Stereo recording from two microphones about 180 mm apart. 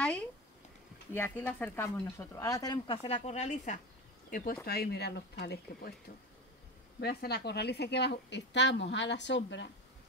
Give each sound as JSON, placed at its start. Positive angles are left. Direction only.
{"t": 0.0, "sound": "a sound", "side_deg": 5}
{"t": 1.1, "sound": "speech", "side_deg": 10}
{"t": 4.6, "sound": "speech", "side_deg": 60}
{"t": 7.0, "sound": "a woman's voice", "side_deg": 60}